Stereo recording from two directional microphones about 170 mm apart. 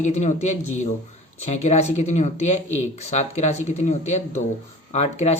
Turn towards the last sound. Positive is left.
turn(degrees=40)  # may be behind; listen again after turning